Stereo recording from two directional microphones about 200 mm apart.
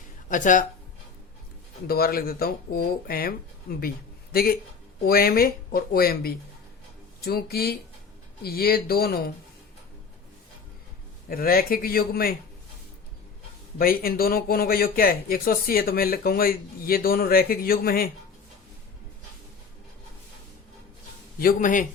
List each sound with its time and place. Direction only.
0.3 s a woman's voice: 40° left (ahead or behind)
1.9 s speech: 50° left (ahead or behind)
11.3 s speech: 45° left (ahead or behind)
13.7 s speech: 45° left (ahead or behind)
21.3 s speech: 45° left (ahead or behind)